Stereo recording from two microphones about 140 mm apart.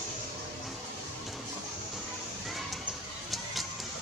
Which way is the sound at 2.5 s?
Centre (ahead or behind).